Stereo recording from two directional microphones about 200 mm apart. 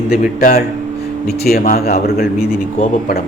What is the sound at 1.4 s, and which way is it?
Speech, 45° left (ahead or behind).